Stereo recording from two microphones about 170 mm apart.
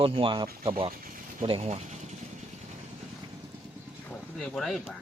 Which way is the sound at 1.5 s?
35° right (ahead or behind).